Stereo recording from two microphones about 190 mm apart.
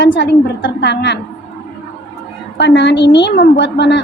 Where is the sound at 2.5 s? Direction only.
65° left (ahead or behind).